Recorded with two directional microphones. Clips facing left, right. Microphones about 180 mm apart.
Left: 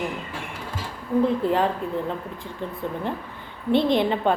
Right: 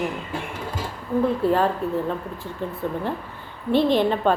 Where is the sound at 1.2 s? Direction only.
15° left (ahead or behind).